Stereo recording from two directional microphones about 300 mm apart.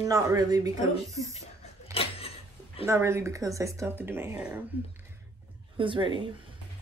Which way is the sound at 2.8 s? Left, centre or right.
Centre.